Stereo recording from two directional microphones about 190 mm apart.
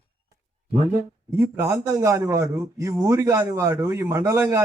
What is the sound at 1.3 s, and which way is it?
A man's voice, 15° right (ahead or behind).